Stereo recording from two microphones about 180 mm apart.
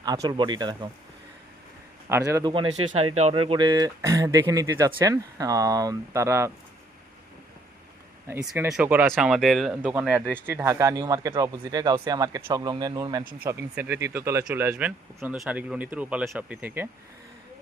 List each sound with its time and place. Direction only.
0.0 s speech: 20° right (ahead or behind)
2.0 s speech: 15° right (ahead or behind)
2.5 s speech: 30° right (ahead or behind)
8.7 s speech: 5° right (ahead or behind)